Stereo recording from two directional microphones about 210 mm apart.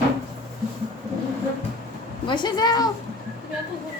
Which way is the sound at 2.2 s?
20° left (ahead or behind).